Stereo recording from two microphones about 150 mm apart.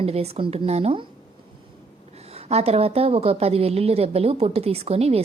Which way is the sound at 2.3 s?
45° right (ahead or behind).